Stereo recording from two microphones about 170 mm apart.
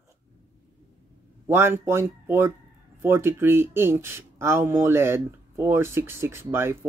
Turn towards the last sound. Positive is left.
turn(degrees=-15)  # may be behind; listen again after turning